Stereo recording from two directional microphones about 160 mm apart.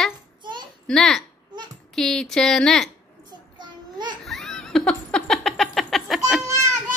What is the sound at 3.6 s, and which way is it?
Babbling, 30° right (ahead or behind).